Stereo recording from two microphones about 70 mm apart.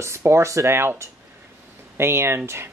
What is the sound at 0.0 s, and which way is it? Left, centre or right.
Speech, right.